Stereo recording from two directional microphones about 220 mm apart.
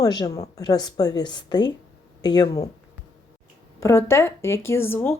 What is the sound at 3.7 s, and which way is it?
Speech, 10° left (ahead or behind).